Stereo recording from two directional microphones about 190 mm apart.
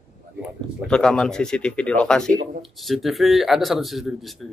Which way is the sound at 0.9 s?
5° left (ahead or behind).